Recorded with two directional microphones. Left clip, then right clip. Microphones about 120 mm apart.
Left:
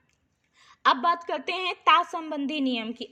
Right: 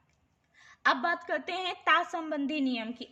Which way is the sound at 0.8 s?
35° left (ahead or behind).